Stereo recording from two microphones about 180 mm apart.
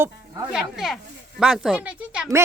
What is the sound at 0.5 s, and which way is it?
Speech, centre (ahead or behind).